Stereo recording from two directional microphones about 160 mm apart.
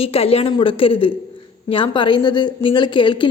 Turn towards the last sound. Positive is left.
turn(degrees=30)  # may be behind; listen again after turning